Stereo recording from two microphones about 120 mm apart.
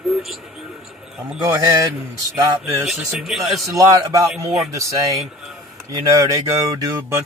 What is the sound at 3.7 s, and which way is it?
Speech, 30° right (ahead or behind).